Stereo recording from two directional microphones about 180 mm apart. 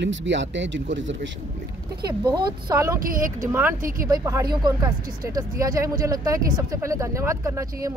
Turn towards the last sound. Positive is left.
turn(degrees=-15)  # may be behind; listen again after turning